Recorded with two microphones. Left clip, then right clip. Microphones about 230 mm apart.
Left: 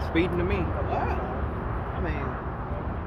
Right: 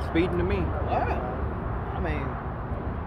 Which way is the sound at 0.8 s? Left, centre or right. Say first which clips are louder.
Right 4 dB; right.